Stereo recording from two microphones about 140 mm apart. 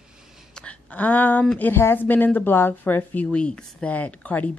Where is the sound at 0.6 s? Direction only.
10° left (ahead or behind).